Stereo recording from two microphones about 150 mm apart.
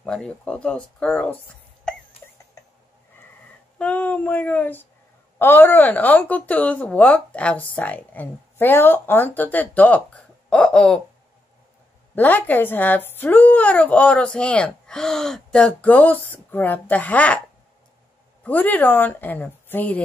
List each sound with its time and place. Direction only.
0.0 s speech: 5° left (ahead or behind)
1.9 s a sound: 5° left (ahead or behind)
3.7 s speech: 10° left (ahead or behind)
12.2 s speech: 10° left (ahead or behind)
18.4 s speech: 10° left (ahead or behind)